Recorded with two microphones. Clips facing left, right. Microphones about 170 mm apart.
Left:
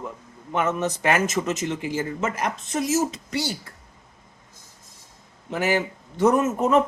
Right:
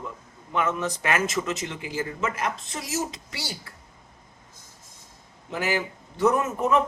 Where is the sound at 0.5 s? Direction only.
45° left (ahead or behind).